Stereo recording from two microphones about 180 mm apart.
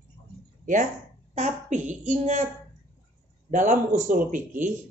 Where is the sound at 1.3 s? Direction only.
40° right (ahead or behind).